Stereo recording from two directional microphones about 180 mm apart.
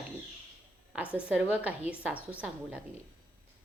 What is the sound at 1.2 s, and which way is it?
Speech, 5° right (ahead or behind).